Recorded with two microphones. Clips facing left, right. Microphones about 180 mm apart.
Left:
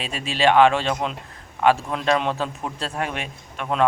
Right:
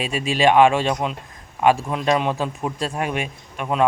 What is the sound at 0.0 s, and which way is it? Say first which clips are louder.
A man's voice: right 3 dB; 10° right (ahead or behind).